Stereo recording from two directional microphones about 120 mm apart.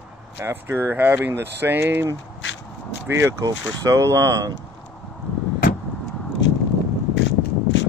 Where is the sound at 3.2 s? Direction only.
20° right (ahead or behind).